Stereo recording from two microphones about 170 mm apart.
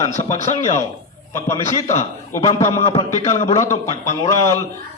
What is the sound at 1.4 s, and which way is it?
A man's voice, 15° left (ahead or behind).